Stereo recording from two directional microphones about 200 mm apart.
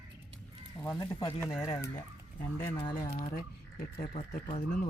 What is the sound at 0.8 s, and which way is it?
Speech, 15° left (ahead or behind).